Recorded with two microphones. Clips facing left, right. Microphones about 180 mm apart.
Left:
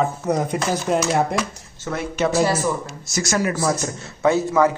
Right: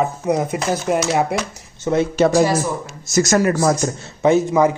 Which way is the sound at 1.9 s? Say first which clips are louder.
Right 9 dB; 20° right (ahead or behind).